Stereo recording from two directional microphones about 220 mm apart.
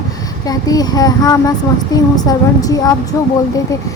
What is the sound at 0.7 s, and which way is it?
Speech, 15° left (ahead or behind).